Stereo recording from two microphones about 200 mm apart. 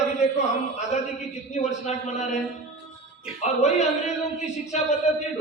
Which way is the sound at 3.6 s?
35° left (ahead or behind).